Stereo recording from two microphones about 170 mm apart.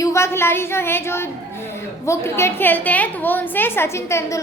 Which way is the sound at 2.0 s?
15° left (ahead or behind).